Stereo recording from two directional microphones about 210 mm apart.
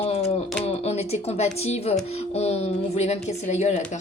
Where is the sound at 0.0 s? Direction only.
30° left (ahead or behind).